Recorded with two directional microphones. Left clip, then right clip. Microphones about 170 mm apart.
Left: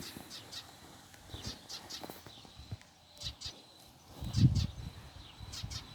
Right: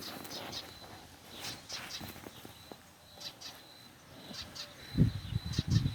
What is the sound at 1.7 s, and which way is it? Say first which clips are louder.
Clip-clop: right 3 dB; 45° left (ahead or behind).